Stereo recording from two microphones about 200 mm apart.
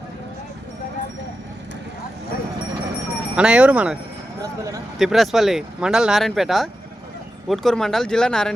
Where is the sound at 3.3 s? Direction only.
5° right (ahead or behind).